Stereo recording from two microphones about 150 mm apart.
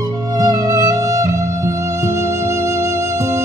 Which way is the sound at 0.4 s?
20° right (ahead or behind).